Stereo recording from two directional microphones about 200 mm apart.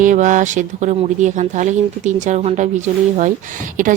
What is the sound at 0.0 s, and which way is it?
Speech, 40° right (ahead or behind).